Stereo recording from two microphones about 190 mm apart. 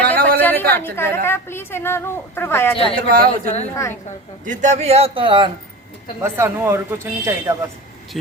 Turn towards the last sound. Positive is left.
turn(degrees=-15)  # may be behind; listen again after turning